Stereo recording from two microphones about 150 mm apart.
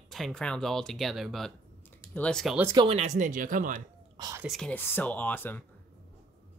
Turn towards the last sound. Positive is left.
turn(degrees=10)  # may be behind; listen again after turning